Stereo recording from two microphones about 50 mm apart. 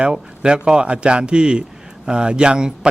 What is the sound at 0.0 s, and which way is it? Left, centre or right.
A man's voice, centre.